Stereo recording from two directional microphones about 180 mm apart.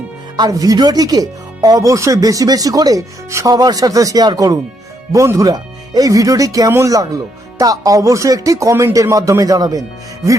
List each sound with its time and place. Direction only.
0.3 s speech: 20° right (ahead or behind)